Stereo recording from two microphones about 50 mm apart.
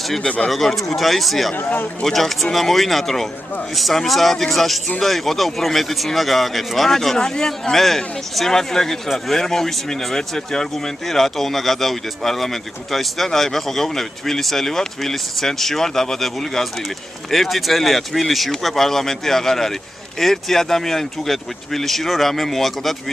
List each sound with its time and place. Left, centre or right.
0.5 s speech: centre
1.5 s speech: left
2.0 s speech: centre